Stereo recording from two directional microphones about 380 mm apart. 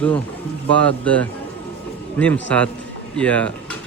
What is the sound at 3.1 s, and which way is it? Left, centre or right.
Speech, centre.